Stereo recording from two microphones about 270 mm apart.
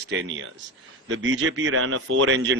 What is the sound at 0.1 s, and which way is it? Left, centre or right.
A man's voice, right.